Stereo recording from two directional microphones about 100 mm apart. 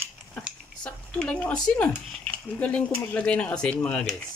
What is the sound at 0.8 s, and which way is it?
Speech, 10° left (ahead or behind).